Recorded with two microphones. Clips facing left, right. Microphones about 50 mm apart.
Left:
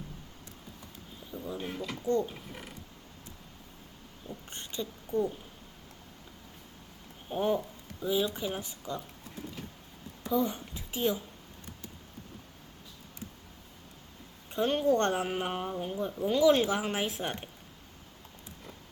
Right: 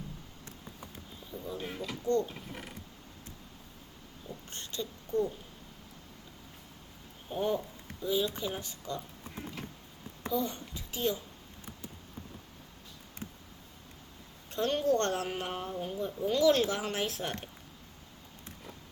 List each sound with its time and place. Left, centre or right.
1.3 s speech: centre
2.0 s speech: centre
2.3 s speech: centre
4.3 s speech: centre
7.3 s speech: centre
10.3 s a child's voice: centre
14.5 s speech: centre